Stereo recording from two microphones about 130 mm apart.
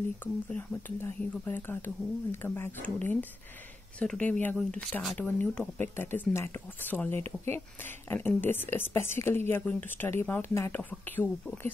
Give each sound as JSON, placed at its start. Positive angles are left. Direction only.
{"t": 0.2, "sound": "speech", "side_deg": 15}